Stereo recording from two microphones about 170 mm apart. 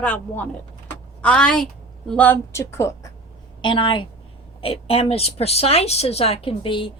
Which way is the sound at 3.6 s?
30° left (ahead or behind).